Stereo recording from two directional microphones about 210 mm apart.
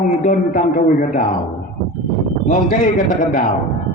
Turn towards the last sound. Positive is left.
turn(degrees=40)  # may be behind; listen again after turning